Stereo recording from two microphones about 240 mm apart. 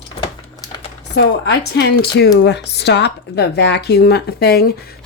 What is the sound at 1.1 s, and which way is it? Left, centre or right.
A woman's voice, left.